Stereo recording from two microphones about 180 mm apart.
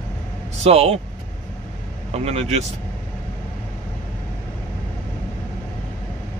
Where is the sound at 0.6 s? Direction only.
35° right (ahead or behind).